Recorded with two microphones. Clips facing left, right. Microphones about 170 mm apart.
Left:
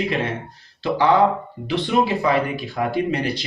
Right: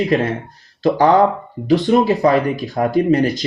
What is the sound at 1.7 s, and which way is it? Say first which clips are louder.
Speech: right 7 dB; 40° right (ahead or behind).